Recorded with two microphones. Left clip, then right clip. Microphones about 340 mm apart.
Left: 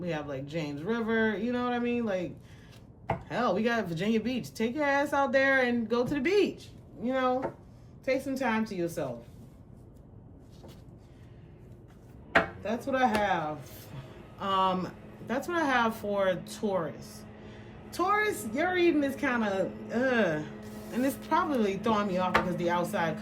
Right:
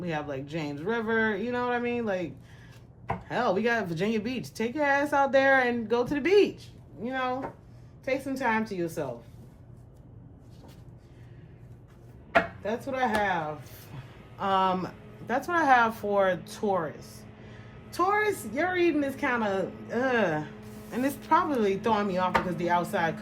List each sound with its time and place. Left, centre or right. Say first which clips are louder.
0.0 s a woman's voice: right 2 dB; centre
3.2 s a woman's voice: right 3 dB; centre
12.6 s a woman's voice: left 1 dB; centre